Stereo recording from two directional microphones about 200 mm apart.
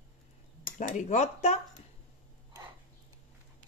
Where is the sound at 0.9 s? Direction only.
35° left (ahead or behind).